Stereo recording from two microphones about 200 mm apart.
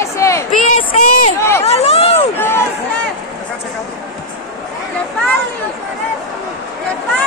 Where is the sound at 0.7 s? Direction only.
40° left (ahead or behind).